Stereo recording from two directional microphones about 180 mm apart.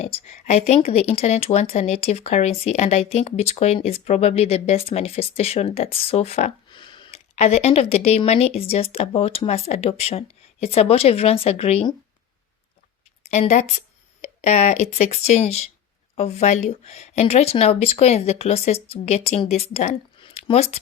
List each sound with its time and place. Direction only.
0.0 s speech: 35° left (ahead or behind)
13.2 s speech: 40° left (ahead or behind)